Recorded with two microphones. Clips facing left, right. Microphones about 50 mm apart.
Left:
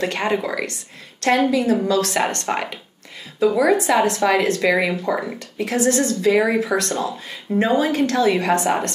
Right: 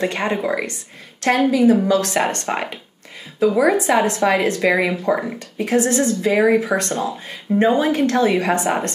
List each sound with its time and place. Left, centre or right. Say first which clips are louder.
0.0 s a woman's voice: right 1 dB; centre